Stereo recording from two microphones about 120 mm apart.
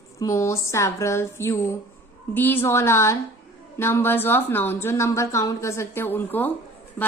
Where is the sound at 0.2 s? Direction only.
25° left (ahead or behind).